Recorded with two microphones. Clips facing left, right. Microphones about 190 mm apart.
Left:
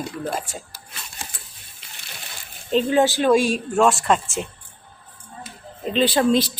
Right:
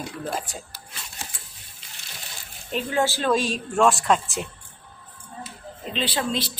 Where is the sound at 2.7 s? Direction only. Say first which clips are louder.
Left 6 dB; 25° left (ahead or behind); by 4.4 s centre (ahead or behind).